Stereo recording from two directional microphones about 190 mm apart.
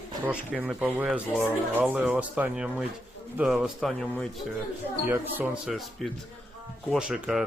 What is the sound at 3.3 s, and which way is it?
Speech, centre (ahead or behind).